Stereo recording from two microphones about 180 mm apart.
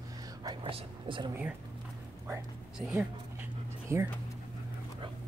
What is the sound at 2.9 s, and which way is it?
Speech, 5° right (ahead or behind).